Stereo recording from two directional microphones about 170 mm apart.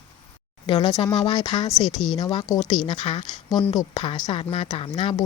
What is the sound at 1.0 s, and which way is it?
Speech, 25° left (ahead or behind).